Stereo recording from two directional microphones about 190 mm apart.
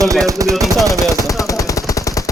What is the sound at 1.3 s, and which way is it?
Machine gun, 15° left (ahead or behind).